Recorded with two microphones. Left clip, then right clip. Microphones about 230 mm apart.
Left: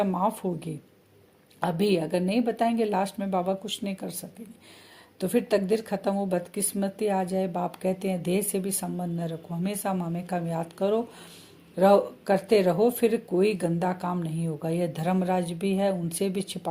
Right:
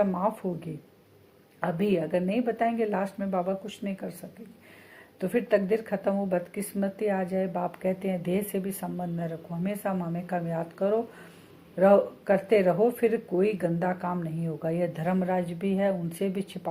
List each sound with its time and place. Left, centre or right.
0.0 s speech: left
5.2 s speech: left